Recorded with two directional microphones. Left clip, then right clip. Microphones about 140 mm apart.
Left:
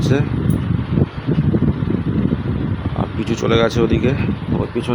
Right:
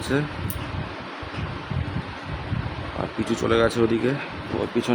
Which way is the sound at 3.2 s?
10° left (ahead or behind).